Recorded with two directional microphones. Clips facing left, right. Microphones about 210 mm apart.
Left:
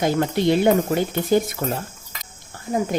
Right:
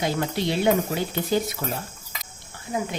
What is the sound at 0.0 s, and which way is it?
Speech, 50° left (ahead or behind).